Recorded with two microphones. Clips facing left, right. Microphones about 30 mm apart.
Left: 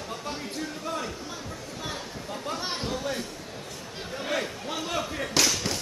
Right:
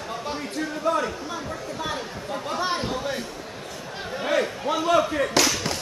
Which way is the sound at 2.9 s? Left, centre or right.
Centre.